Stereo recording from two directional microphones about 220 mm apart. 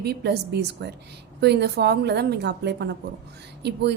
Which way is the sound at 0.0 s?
50° right (ahead or behind).